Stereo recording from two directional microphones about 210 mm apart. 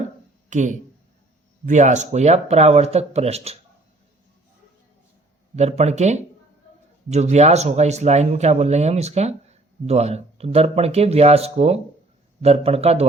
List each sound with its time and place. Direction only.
0.5 s speech: 35° right (ahead or behind)
5.5 s speech: 30° right (ahead or behind)